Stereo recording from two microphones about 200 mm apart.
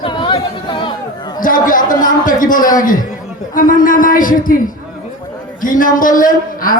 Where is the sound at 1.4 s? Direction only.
45° left (ahead or behind).